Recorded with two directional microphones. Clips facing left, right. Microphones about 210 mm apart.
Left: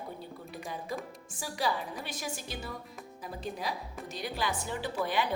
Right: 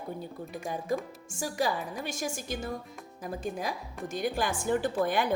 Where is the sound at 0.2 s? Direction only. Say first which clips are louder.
Right 5 dB; 45° right (ahead or behind).